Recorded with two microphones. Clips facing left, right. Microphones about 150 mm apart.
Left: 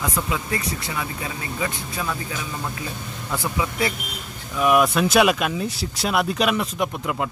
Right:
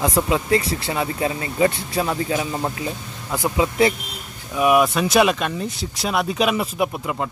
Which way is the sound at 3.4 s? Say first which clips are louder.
Right 7 dB; 25° right (ahead or behind).